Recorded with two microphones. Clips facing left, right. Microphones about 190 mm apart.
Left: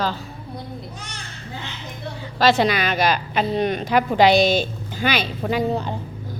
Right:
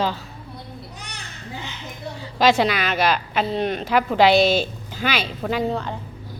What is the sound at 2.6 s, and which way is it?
A woman's voice, 5° right (ahead or behind).